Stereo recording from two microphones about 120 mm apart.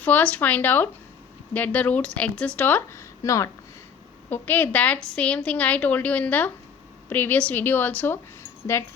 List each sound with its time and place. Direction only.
0.0 s a woman's voice: 15° left (ahead or behind)
4.3 s a woman's voice: 15° left (ahead or behind)